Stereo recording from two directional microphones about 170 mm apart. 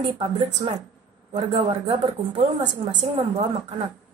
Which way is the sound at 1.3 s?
35° right (ahead or behind).